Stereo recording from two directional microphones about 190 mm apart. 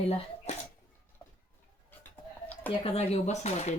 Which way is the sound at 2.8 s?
35° left (ahead or behind).